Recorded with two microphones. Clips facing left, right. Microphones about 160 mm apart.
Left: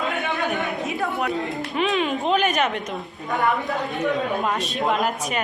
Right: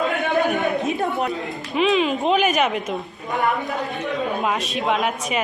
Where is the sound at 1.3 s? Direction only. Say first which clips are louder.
Left 1 dB; centre (ahead or behind).